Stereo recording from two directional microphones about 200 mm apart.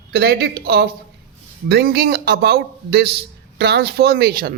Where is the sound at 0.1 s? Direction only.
55° right (ahead or behind).